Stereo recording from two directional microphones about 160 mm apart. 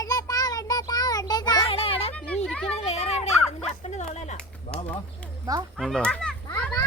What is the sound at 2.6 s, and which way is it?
Speech, 40° left (ahead or behind).